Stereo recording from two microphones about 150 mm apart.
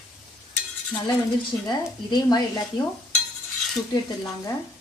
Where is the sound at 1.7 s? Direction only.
30° left (ahead or behind).